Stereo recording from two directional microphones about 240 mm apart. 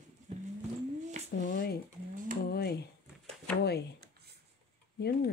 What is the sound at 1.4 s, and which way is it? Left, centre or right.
Speech, left.